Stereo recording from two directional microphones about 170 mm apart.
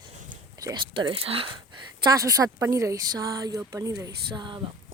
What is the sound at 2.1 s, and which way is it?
A woman's voice, 20° right (ahead or behind).